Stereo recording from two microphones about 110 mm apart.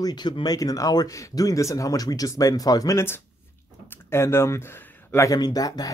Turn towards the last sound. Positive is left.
turn(degrees=35)  # may be behind; listen again after turning